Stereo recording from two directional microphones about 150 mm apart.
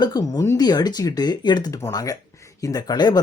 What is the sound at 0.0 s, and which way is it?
Speech, 25° left (ahead or behind).